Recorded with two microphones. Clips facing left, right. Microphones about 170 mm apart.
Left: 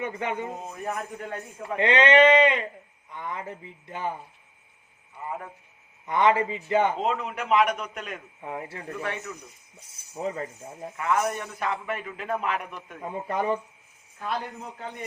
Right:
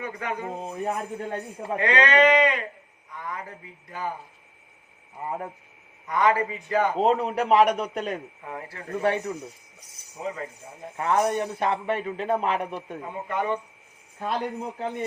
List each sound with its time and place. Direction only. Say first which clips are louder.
0.0 s speech: left 2 dB; 25° left (ahead or behind)
0.7 s a man's voice: right 3 dB; 30° right (ahead or behind)
1.8 s speech: left 2 dB; 25° left (ahead or behind)
6.1 s speech: left 1 dB; 25° left (ahead or behind)
6.9 s a man's voice: right 6 dB; 35° right (ahead or behind)
8.4 s speech: left 5 dB; 20° left (ahead or behind)
8.9 s a man's voice: right 9 dB; 35° right (ahead or behind)
9.8 s speech: left 2 dB; 30° left (ahead or behind)
10.9 s a man's voice: right 3 dB; 30° right (ahead or behind)
13.2 s speech: left 1 dB; 30° left (ahead or behind)
14.2 s a man's voice: right 4 dB; 30° right (ahead or behind)